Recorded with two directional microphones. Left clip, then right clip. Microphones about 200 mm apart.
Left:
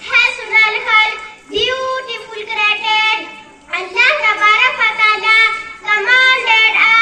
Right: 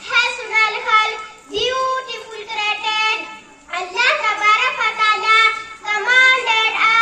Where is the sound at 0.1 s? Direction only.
35° right (ahead or behind).